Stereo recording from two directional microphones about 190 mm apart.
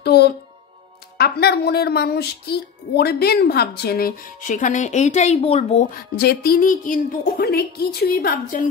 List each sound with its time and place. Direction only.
0.0 s music: 60° left (ahead or behind)
1.1 s speech: 55° left (ahead or behind); by 5.9 s 35° left (ahead or behind)
6.1 s a woman's voice: 55° left (ahead or behind)